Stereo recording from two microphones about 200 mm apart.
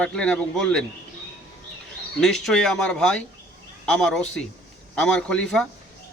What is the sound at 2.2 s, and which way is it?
A man's voice, centre (ahead or behind).